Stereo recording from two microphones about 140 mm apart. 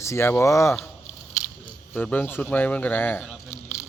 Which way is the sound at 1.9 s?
10° left (ahead or behind).